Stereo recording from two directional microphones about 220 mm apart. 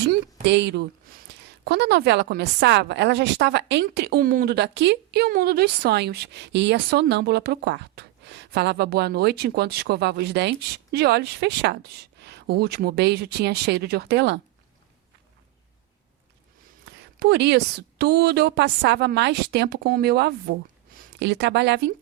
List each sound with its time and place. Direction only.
0.4 s speech: 55° right (ahead or behind)
17.2 s speech: 50° right (ahead or behind)